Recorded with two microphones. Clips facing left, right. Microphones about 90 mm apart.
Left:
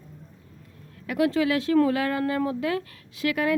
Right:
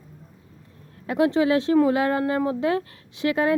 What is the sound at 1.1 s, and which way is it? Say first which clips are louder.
Speech: right 3 dB; 25° right (ahead or behind).